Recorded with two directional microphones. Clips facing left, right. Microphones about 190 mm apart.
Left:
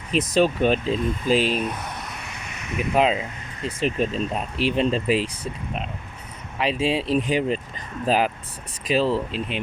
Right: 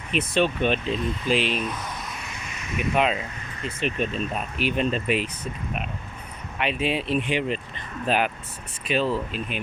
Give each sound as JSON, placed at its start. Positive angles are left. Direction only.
{"t": 0.1, "sound": "speech", "side_deg": 35}
{"t": 1.6, "sound": "speech", "side_deg": 60}
{"t": 2.9, "sound": "speech", "side_deg": 30}
{"t": 6.6, "sound": "speech", "side_deg": 30}